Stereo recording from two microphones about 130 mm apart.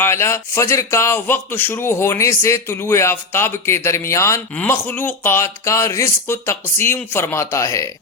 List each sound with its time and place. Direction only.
0.0 s speech: 20° left (ahead or behind)